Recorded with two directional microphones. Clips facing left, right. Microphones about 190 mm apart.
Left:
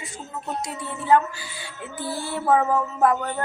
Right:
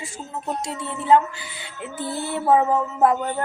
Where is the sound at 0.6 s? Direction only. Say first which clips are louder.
Right 2 dB; 25° right (ahead or behind).